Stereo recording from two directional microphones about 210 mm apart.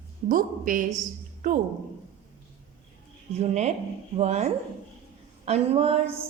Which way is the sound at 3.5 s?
30° right (ahead or behind).